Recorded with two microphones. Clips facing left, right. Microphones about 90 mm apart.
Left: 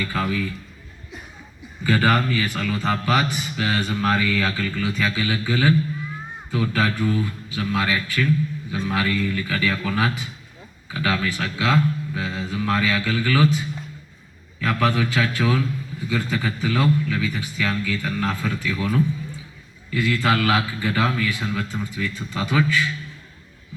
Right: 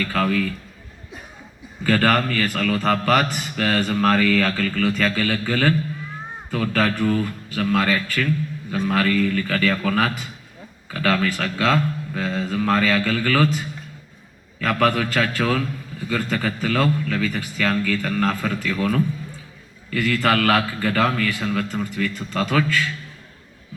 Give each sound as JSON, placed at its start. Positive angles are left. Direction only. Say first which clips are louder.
{"t": 0.0, "sound": "a man's voice", "louder": "right 3 dB", "side_deg": -60}
{"t": 1.8, "sound": "a man's voice", "louder": "right 1 dB", "side_deg": -55}
{"t": 14.6, "sound": "a man's voice", "louder": "right 2 dB", "side_deg": -60}